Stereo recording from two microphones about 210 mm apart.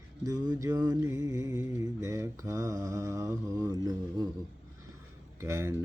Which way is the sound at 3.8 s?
20° right (ahead or behind).